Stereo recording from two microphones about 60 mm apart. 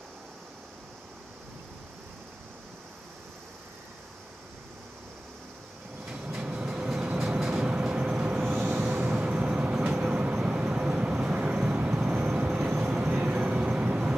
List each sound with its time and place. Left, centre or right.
6.0 s train: right
6.3 s vehicle: centre
8.5 s vehicle: right
8.8 s vehicle: centre